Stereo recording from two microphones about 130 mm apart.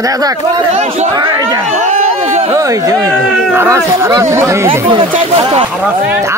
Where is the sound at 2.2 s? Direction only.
55° right (ahead or behind).